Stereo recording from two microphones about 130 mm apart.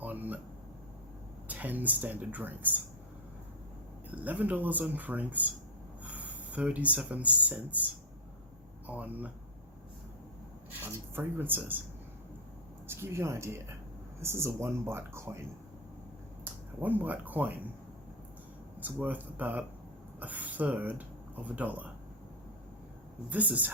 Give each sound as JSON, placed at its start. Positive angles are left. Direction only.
{"t": 0.0, "sound": "air conditioning", "side_deg": -15}
{"t": 1.5, "sound": "speech", "side_deg": -10}
{"t": 4.1, "sound": "speech", "side_deg": -10}
{"t": 8.9, "sound": "speech", "side_deg": -10}
{"t": 11.1, "sound": "speech", "side_deg": -15}
{"t": 13.0, "sound": "speech", "side_deg": -20}
{"t": 16.4, "sound": "speech", "side_deg": -15}
{"t": 18.8, "sound": "speech", "side_deg": -10}
{"t": 23.3, "sound": "speech", "side_deg": -10}